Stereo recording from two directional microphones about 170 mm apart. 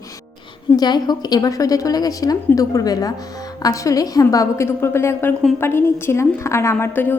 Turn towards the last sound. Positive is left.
turn(degrees=10)  # may be behind; listen again after turning